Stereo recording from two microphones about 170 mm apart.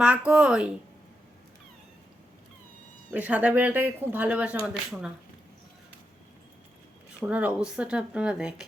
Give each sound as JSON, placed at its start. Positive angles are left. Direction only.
{"t": 0.0, "sound": "speech", "side_deg": -5}
{"t": 3.1, "sound": "speech", "side_deg": -10}
{"t": 7.3, "sound": "speech", "side_deg": -10}